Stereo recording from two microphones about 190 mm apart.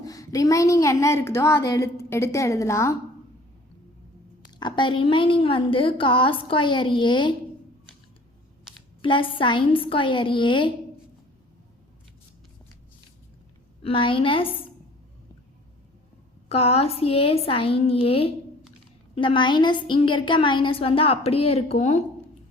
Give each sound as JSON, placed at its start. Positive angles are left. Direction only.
{"t": 0.0, "sound": "a woman's voice", "side_deg": 20}
{"t": 4.6, "sound": "a woman's voice", "side_deg": 25}
{"t": 9.0, "sound": "a woman's voice", "side_deg": 25}
{"t": 13.8, "sound": "a woman's voice", "side_deg": 30}
{"t": 16.5, "sound": "a woman's voice", "side_deg": 30}